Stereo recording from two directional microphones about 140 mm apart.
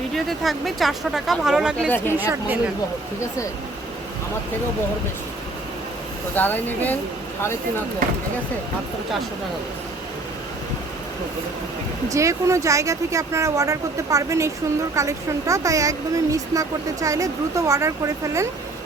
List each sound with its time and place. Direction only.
0.1 s a woman's voice: centre (ahead or behind)
6.3 s speech: 15° left (ahead or behind)
12.0 s speech: 20° right (ahead or behind)